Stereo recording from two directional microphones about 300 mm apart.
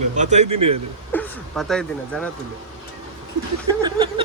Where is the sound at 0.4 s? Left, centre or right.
Right.